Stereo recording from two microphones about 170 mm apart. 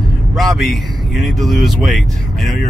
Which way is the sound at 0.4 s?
Centre (ahead or behind).